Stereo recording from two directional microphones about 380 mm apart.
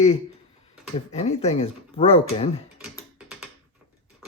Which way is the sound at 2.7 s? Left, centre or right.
Centre.